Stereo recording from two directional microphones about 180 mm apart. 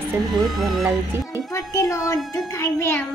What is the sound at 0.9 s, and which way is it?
Speech, 15° right (ahead or behind).